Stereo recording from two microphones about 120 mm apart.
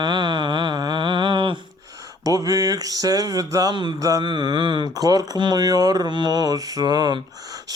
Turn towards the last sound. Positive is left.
turn(degrees=-35)  # may be behind; listen again after turning